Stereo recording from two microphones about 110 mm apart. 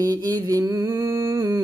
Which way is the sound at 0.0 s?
35° right (ahead or behind).